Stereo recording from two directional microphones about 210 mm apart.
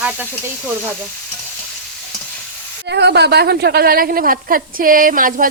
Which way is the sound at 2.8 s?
55° right (ahead or behind).